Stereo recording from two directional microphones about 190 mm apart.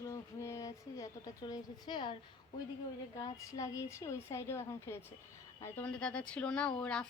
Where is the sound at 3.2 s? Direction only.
20° left (ahead or behind).